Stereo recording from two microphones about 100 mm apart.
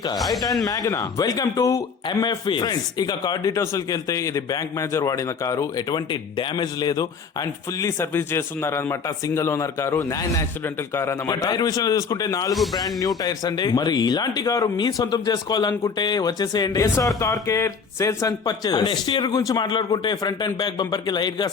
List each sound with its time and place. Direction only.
0.6 s a man's voice: 35° left (ahead or behind)
2.0 s a man's voice: 55° left (ahead or behind); by 10.4 s 30° left (ahead or behind)
11.3 s a man's voice: 40° left (ahead or behind)
18.4 s speech: 45° left (ahead or behind)